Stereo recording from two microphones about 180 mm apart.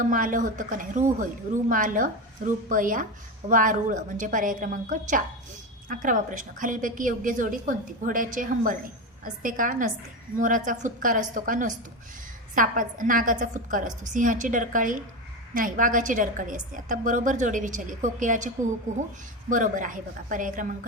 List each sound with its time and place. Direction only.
0.0 s a woman's voice: 50° right (ahead or behind)